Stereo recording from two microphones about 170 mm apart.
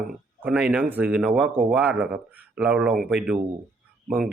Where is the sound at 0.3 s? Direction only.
10° right (ahead or behind).